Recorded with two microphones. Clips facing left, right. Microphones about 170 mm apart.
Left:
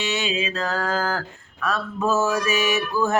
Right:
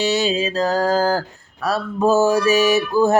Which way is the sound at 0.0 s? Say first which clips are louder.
Right 6 dB; 35° right (ahead or behind).